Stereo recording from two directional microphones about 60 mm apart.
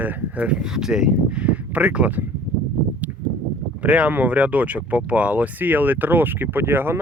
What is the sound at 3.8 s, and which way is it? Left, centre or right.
Speech, right.